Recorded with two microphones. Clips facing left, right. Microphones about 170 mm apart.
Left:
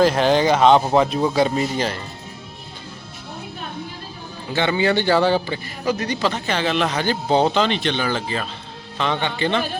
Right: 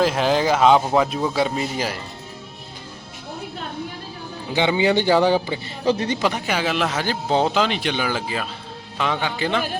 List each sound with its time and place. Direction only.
0.0 s speech: centre (ahead or behind)
4.5 s speech: 15° right (ahead or behind)
5.8 s speech: 25° right (ahead or behind); by 9.7 s 5° right (ahead or behind)